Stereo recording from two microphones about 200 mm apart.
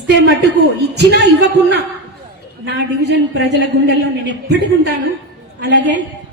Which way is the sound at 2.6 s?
55° right (ahead or behind).